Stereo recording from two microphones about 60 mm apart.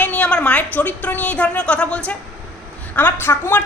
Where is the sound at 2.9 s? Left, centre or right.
Left.